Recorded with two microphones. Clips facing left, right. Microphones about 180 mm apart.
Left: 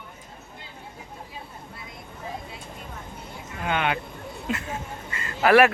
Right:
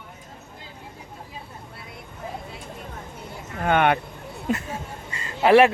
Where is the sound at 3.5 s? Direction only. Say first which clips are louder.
Right 6 dB; 50° right (ahead or behind).